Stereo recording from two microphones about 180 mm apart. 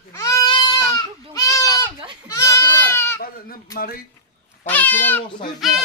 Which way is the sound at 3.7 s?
55° left (ahead or behind).